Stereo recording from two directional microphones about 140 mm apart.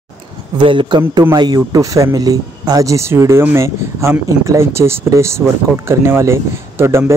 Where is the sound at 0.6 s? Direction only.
35° right (ahead or behind).